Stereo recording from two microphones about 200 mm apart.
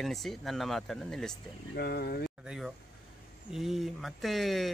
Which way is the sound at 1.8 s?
50° left (ahead or behind).